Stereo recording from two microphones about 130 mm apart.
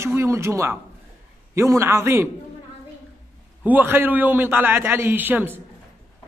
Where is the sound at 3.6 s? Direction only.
15° right (ahead or behind).